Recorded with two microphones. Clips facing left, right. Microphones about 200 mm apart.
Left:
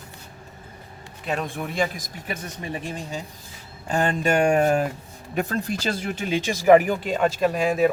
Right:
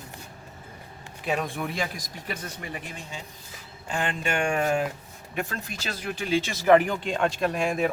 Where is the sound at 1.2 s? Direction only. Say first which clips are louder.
Even; centre (ahead or behind).